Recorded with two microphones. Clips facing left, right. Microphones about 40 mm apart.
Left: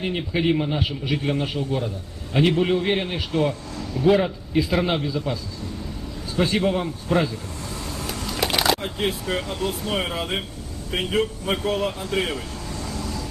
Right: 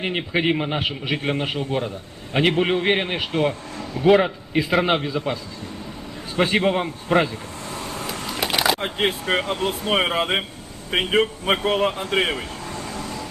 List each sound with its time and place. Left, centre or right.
0.0 s a man's voice: right
8.3 s a sound: centre
8.8 s a man's voice: right